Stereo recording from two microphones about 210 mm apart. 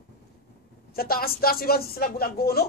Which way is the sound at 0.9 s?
45° left (ahead or behind).